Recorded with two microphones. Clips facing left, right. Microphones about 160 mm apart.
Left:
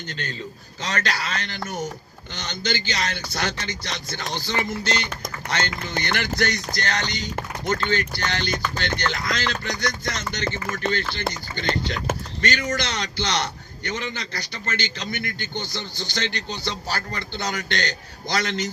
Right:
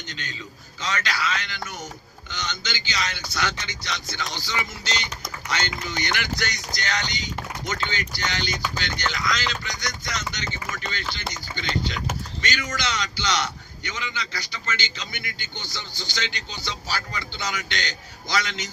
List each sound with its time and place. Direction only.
0.1 s a man's voice: 50° left (ahead or behind)
8.8 s music: 55° left (ahead or behind)
10.3 s a man's voice: 55° left (ahead or behind)